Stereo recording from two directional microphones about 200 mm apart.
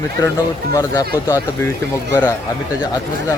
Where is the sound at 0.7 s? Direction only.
20° left (ahead or behind).